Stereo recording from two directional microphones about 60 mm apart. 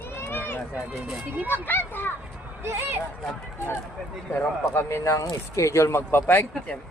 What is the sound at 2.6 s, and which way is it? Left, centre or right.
Speech, right.